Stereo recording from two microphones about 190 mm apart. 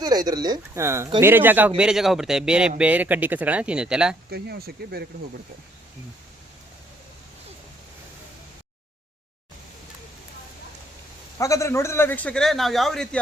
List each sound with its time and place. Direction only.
0.0 s a man's voice: 20° right (ahead or behind); by 4.2 s 5° right (ahead or behind)
4.3 s speech: 60° right (ahead or behind)
11.3 s a man's voice: 15° left (ahead or behind)